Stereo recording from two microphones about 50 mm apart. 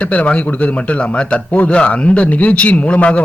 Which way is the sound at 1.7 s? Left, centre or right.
Left.